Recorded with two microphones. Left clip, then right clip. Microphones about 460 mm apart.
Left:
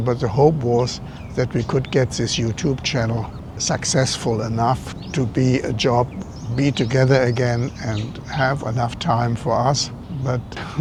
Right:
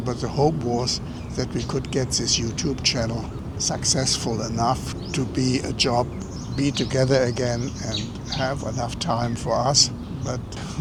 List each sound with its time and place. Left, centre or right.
0.0 s speech: left